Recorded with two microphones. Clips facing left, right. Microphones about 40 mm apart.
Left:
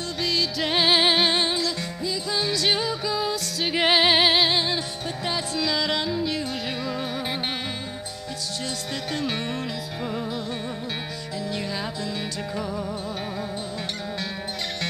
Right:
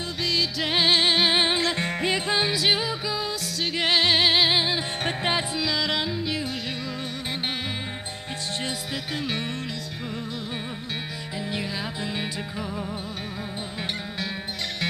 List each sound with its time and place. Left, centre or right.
0.2 s music: centre
1.3 s music: right
1.6 s music: right
2.0 s music: right
2.5 s music: centre
3.7 s music: centre
4.5 s music: centre
5.0 s music: right
5.6 s music: centre
9.1 s music: centre